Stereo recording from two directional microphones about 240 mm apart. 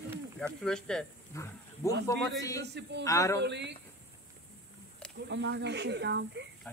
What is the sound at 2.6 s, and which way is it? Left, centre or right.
Speech, right.